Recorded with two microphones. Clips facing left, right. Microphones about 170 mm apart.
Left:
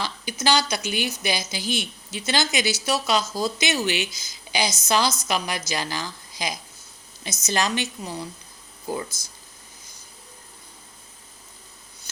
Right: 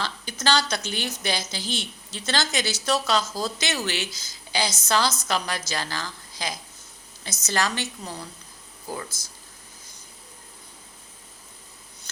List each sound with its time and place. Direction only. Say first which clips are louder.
0.0 s a woman's voice: left 2 dB; 10° left (ahead or behind)